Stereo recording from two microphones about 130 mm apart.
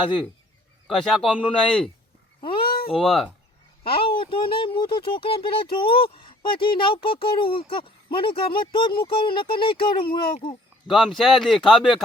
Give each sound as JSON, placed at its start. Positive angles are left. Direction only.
{"t": 0.9, "sound": "a man's voice", "side_deg": 0}
{"t": 2.4, "sound": "a sound", "side_deg": 40}
{"t": 3.0, "sound": "a man's voice", "side_deg": 0}
{"t": 3.8, "sound": "speech", "side_deg": 45}
{"t": 10.8, "sound": "a man's voice", "side_deg": 0}